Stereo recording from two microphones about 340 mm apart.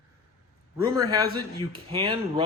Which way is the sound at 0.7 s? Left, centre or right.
Centre.